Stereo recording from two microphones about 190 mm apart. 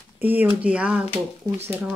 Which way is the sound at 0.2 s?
10° right (ahead or behind).